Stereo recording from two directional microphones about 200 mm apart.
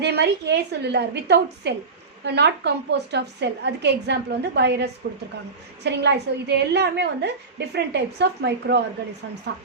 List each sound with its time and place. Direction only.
0.0 s a woman's voice: 55° right (ahead or behind)